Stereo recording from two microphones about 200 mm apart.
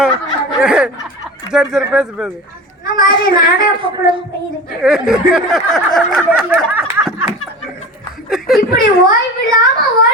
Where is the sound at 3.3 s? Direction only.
25° right (ahead or behind).